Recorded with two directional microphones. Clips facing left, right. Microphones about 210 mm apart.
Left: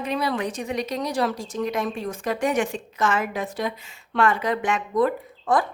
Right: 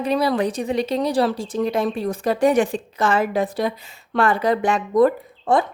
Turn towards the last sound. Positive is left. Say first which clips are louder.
# right 6 dB
turn(degrees=-40)  # may be behind; listen again after turning